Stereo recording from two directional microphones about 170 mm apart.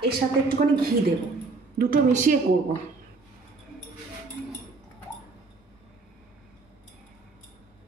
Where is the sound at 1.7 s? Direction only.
50° right (ahead or behind).